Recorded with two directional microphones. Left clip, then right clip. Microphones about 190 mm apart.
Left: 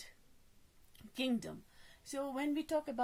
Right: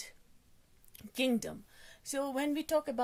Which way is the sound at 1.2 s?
50° right (ahead or behind).